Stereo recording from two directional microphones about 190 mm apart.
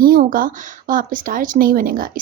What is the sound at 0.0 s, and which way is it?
A woman's voice, 45° right (ahead or behind).